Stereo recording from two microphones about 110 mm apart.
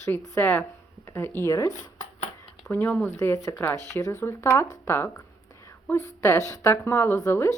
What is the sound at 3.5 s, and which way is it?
Speech, 25° left (ahead or behind).